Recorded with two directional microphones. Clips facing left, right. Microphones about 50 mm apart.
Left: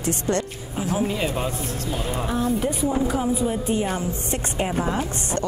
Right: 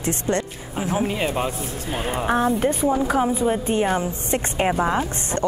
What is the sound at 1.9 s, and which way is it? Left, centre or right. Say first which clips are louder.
Speech: right 5 dB; right.